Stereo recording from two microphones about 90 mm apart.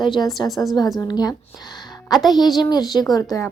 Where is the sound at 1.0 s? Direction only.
45° left (ahead or behind).